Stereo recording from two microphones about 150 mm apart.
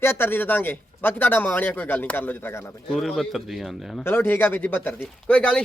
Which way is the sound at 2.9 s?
Centre (ahead or behind).